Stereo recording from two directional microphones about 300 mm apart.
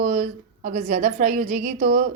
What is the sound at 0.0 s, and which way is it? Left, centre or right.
A woman's voice, right.